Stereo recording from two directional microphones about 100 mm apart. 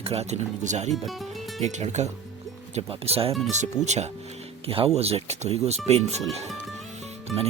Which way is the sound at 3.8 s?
5° right (ahead or behind).